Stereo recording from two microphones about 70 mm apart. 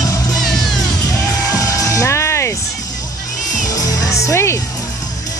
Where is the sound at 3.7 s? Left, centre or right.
Left.